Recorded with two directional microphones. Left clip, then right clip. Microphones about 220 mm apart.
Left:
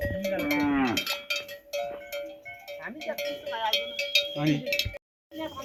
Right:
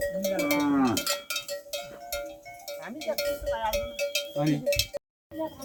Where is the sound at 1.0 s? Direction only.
10° right (ahead or behind).